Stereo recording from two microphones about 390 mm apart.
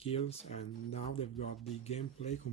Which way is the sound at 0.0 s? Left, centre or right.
Centre.